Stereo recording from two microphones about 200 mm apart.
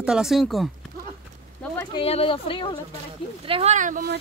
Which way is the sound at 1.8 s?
25° left (ahead or behind).